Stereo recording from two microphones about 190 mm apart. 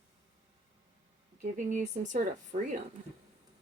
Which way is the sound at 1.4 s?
40° right (ahead or behind).